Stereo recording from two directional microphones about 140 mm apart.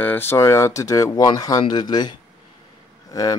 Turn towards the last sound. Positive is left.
turn(degrees=25)  # may be behind; listen again after turning